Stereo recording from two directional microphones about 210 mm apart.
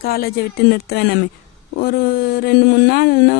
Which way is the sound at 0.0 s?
45° left (ahead or behind).